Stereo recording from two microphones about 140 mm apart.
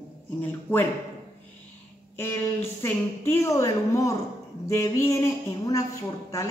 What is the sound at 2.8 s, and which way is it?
A woman's voice, 15° left (ahead or behind).